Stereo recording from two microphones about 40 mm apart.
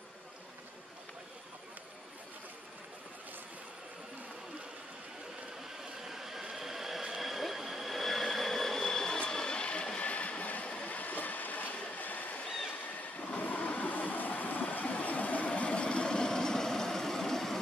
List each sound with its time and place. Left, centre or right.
6.0 s train: centre
6.5 s vehicle: centre; by 10.7 s left
10.9 s train: left
12.0 s a sound: left
13.4 s train: left; by 17.6 s centre